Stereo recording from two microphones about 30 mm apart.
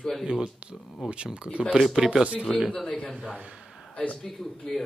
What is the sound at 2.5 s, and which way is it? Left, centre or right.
A man's voice, centre.